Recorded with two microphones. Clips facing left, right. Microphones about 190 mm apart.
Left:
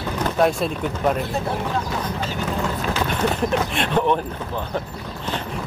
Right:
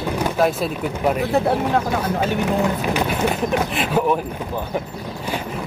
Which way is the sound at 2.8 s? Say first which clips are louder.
Right 2 dB; 15° right (ahead or behind).